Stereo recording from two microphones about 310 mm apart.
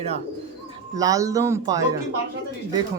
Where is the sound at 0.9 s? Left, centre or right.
Centre.